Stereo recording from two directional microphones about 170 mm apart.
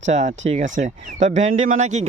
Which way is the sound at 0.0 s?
45° right (ahead or behind).